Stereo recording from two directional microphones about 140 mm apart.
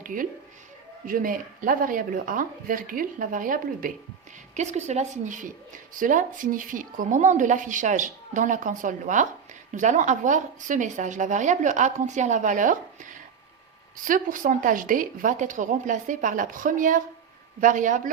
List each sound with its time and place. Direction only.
0.0 s speech: 75° right (ahead or behind)
4.5 s a woman's voice: 55° right (ahead or behind)